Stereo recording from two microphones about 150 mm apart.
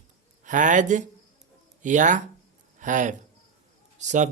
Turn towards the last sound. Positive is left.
turn(degrees=-55)  # may be behind; listen again after turning